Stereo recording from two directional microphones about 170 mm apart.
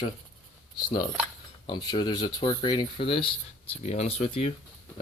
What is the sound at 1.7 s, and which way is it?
Speech, 25° left (ahead or behind).